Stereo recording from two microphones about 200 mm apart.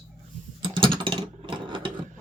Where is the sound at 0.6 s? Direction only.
25° right (ahead or behind).